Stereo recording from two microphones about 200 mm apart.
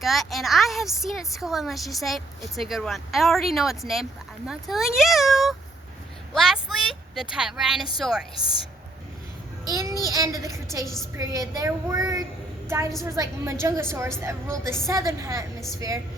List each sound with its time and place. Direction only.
0.0 s a woman's voice: centre (ahead or behind)
6.3 s a sound: centre (ahead or behind)
7.9 s a woman's voice: centre (ahead or behind)
8.4 s a woman's voice: 25° left (ahead or behind)
9.6 s a child's voice: 15° right (ahead or behind)